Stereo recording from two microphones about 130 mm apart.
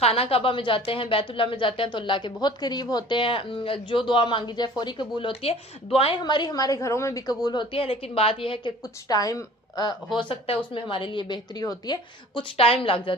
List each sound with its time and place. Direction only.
0.0 s a woman's voice: 50° left (ahead or behind)